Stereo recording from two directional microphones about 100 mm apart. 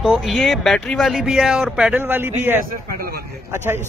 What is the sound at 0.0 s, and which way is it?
Speech, centre (ahead or behind).